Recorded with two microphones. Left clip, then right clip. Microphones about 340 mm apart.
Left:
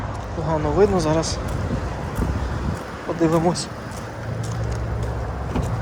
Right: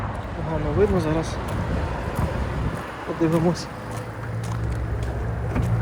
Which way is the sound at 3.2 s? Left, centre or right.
Centre.